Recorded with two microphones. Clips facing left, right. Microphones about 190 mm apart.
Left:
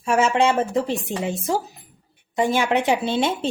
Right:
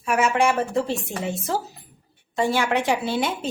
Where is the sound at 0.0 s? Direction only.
25° left (ahead or behind).